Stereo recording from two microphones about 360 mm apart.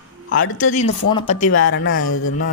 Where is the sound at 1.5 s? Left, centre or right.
Left.